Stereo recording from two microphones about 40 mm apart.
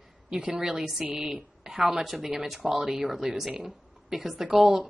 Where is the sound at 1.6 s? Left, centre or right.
Centre.